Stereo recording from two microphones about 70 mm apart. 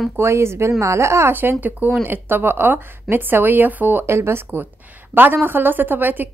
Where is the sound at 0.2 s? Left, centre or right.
Right.